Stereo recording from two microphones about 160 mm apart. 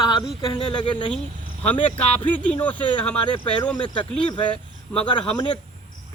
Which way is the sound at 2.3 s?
10° left (ahead or behind).